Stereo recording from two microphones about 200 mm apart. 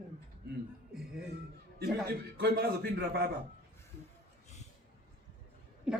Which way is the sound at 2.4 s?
50° right (ahead or behind).